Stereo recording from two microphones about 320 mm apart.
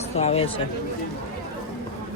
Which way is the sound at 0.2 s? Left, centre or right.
Centre.